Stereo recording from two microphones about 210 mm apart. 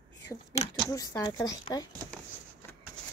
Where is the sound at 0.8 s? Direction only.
15° left (ahead or behind).